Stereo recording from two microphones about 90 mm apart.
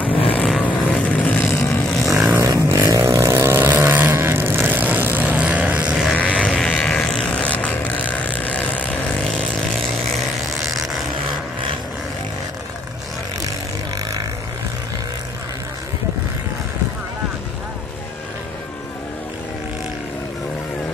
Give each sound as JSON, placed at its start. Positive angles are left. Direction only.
{"t": 0.1, "sound": "vehicle", "side_deg": 90}
{"t": 0.6, "sound": "vehicle", "side_deg": 15}
{"t": 2.3, "sound": "vehicle", "side_deg": -30}
{"t": 6.1, "sound": "vehicle", "side_deg": 10}